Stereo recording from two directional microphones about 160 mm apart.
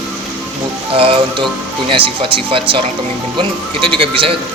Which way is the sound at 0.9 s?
35° right (ahead or behind).